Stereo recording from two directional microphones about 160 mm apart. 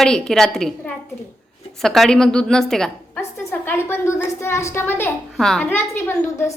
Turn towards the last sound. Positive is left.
turn(degrees=15)  # may be behind; listen again after turning